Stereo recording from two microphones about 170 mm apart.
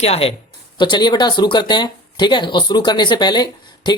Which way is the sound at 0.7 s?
25° left (ahead or behind).